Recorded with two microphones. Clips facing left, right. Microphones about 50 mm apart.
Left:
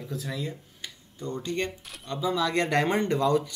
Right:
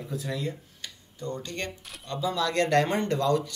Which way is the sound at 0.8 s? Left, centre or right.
Left.